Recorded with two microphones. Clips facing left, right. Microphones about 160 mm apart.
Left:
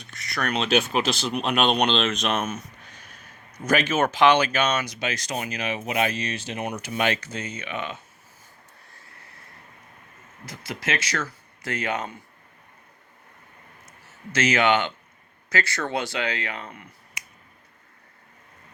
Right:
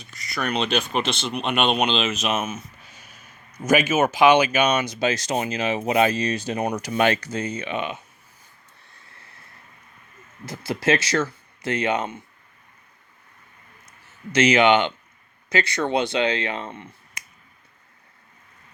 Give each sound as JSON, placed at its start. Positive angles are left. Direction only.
{"t": 0.0, "sound": "speech", "side_deg": 0}
{"t": 4.9, "sound": "speech", "side_deg": -30}
{"t": 10.4, "sound": "speech", "side_deg": -30}
{"t": 14.3, "sound": "speech", "side_deg": -20}